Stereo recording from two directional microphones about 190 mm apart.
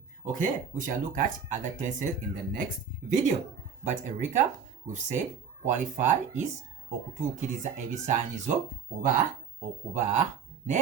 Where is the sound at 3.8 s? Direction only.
40° right (ahead or behind).